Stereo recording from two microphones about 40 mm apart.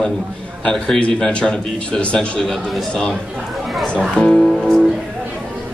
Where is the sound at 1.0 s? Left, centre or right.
Left.